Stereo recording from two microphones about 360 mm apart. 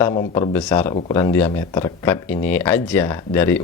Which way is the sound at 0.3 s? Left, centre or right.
Centre.